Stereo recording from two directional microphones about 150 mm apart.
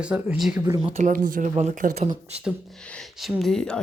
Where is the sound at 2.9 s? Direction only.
Centre (ahead or behind).